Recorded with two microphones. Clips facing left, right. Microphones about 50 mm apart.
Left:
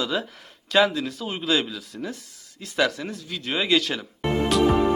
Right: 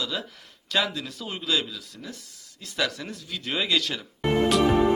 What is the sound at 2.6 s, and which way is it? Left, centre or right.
Speech, centre.